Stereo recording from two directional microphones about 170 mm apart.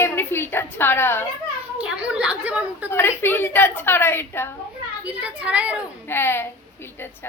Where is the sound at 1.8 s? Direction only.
5° right (ahead or behind).